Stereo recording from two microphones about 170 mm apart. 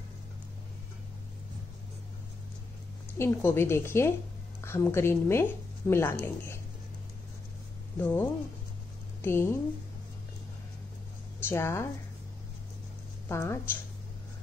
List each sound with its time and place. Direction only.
3.2 s a woman's voice: 15° left (ahead or behind)
8.0 s a woman's voice: 10° left (ahead or behind)
11.3 s speech: 15° left (ahead or behind)
13.3 s a woman's voice: 15° left (ahead or behind)